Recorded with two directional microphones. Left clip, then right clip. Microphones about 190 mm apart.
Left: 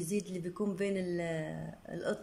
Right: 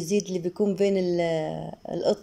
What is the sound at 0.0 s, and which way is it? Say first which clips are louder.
Speech: right 11 dB; 20° right (ahead or behind).